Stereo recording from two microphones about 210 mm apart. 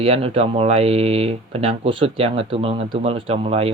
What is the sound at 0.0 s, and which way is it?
Speech, 25° right (ahead or behind).